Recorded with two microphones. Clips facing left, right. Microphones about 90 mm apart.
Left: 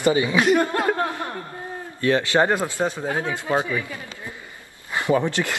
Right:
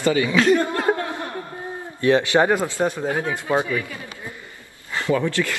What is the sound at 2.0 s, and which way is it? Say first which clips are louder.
Speech: right 2 dB; 20° right (ahead or behind).